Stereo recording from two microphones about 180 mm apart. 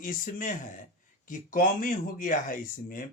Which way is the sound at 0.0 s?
50° left (ahead or behind).